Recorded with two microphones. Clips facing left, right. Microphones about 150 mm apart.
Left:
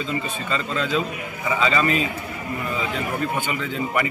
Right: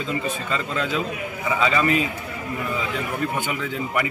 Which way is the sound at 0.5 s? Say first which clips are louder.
Left 4 dB; 5° right (ahead or behind).